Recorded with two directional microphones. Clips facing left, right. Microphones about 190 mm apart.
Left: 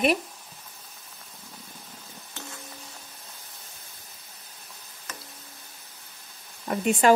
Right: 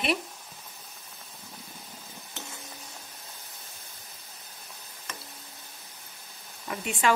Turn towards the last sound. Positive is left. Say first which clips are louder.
# left 7 dB
turn(degrees=45)  # may be behind; listen again after turning